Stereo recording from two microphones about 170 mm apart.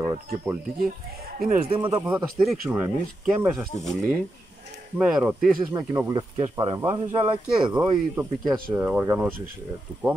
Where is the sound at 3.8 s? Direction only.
5° left (ahead or behind).